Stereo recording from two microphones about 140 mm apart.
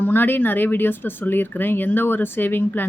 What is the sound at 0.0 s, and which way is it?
Speech, 15° left (ahead or behind).